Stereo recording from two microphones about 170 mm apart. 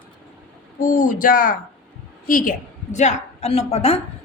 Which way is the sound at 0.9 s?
50° left (ahead or behind).